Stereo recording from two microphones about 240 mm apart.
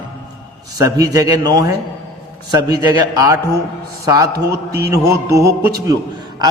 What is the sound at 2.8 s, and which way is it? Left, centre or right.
Speech, centre.